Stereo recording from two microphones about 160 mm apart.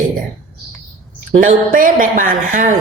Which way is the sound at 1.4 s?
60° right (ahead or behind).